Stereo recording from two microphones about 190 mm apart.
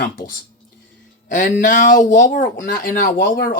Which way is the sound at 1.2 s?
45° left (ahead or behind).